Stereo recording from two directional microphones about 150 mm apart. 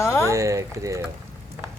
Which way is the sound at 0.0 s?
20° left (ahead or behind).